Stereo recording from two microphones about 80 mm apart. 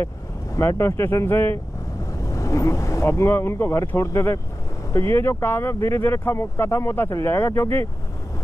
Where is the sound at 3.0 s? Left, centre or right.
Left.